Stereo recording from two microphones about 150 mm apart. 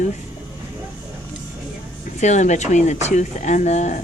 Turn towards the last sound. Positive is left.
turn(degrees=50)  # may be behind; listen again after turning